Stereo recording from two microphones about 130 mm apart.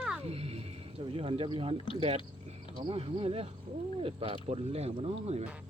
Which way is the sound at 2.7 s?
45° right (ahead or behind).